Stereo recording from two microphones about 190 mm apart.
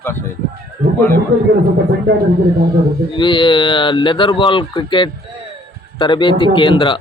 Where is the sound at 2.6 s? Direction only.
50° right (ahead or behind).